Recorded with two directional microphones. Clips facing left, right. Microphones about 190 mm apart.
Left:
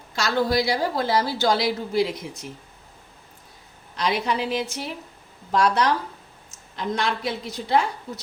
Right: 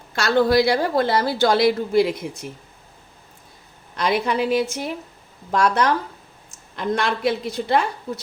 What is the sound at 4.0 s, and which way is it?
A woman's voice, 55° right (ahead or behind).